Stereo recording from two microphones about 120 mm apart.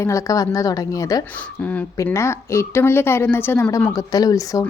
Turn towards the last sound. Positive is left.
turn(degrees=30)  # may be behind; listen again after turning